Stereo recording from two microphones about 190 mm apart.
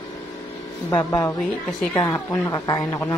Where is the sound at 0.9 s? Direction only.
20° left (ahead or behind).